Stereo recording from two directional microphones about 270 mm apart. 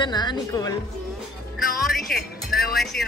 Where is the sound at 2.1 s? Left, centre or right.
Left.